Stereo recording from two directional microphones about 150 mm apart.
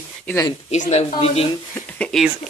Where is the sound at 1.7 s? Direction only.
5° left (ahead or behind).